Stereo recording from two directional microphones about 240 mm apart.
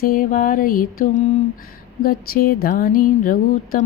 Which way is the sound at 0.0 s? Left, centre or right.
Left.